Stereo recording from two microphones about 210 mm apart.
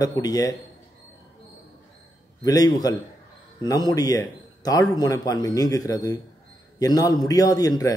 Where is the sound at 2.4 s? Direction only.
15° left (ahead or behind).